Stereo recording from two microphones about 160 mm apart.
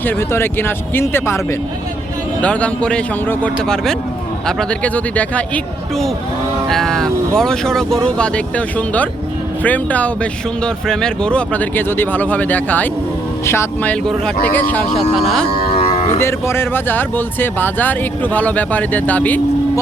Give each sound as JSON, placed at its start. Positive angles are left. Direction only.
{"t": 0.0, "sound": "speech", "side_deg": 15}
{"t": 2.4, "sound": "speech", "side_deg": 10}
{"t": 6.7, "sound": "speech", "side_deg": 5}
{"t": 15.7, "sound": "cattle", "side_deg": 35}
{"t": 16.1, "sound": "speech", "side_deg": 15}